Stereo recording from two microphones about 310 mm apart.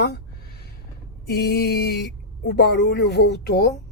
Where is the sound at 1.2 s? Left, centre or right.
Left.